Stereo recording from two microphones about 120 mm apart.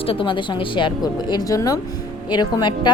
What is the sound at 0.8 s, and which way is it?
Speech, 40° left (ahead or behind).